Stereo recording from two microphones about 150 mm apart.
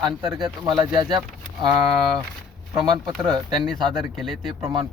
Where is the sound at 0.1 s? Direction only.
Centre (ahead or behind).